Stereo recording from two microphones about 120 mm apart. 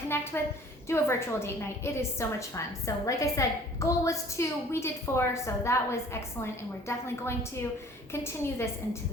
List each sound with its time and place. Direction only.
0.1 s a woman's voice: 20° left (ahead or behind)